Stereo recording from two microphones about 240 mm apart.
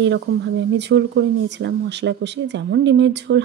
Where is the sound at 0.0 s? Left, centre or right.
Right.